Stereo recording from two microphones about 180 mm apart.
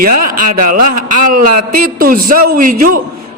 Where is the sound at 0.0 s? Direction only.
50° right (ahead or behind).